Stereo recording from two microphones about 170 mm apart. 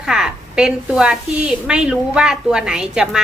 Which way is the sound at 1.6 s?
5° right (ahead or behind).